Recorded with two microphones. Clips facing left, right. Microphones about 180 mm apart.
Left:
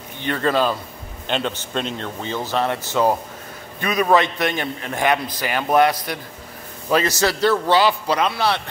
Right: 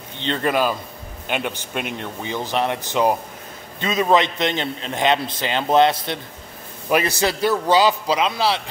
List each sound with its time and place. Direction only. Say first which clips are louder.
0.2 s a man's voice: left 1 dB; 20° right (ahead or behind)
6.9 s a man's voice: left 1 dB; 15° right (ahead or behind)